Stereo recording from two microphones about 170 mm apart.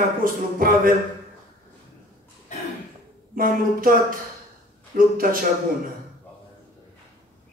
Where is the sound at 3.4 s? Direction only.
55° right (ahead or behind).